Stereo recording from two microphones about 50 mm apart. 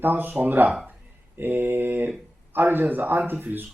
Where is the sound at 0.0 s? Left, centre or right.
Right.